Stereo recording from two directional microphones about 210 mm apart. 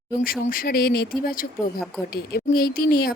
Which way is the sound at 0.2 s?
45° left (ahead or behind).